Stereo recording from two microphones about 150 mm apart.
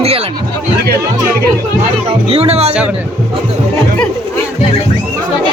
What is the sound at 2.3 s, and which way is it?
Speech, 45° right (ahead or behind).